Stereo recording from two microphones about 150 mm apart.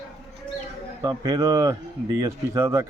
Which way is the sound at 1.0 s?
25° right (ahead or behind).